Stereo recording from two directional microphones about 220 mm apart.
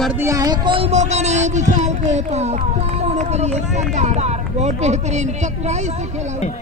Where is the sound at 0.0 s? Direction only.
10° right (ahead or behind); by 6.4 s 30° right (ahead or behind).